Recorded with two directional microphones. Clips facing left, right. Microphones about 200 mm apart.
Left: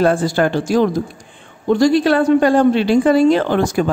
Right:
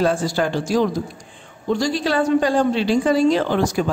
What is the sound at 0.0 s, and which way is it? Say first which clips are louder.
A man's voice: left 4 dB; 55° left (ahead or behind).